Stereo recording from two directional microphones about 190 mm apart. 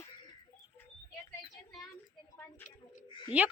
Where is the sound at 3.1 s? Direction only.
25° left (ahead or behind).